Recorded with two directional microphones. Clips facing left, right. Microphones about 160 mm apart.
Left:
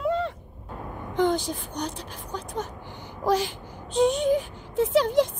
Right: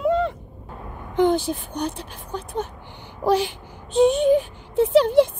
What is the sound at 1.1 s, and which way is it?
Speech, 20° right (ahead or behind).